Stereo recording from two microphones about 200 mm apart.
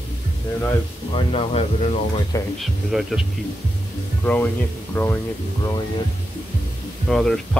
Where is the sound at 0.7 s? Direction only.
25° left (ahead or behind).